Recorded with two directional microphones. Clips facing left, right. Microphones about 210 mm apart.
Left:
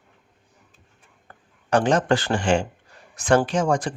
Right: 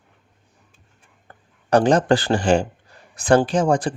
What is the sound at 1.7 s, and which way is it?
Speech, 35° right (ahead or behind).